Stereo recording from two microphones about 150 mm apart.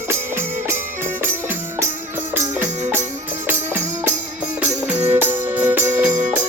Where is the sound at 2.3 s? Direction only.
15° right (ahead or behind).